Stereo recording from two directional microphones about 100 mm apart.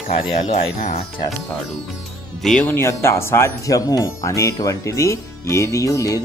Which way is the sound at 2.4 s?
5° left (ahead or behind).